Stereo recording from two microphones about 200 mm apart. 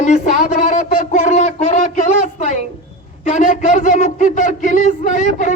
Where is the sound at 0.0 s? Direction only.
35° left (ahead or behind).